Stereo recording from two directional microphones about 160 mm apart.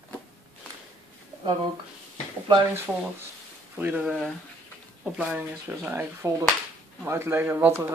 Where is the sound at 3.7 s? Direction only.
10° right (ahead or behind).